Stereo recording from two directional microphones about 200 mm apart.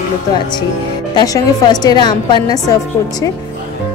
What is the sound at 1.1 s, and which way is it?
A woman's voice, 20° left (ahead or behind).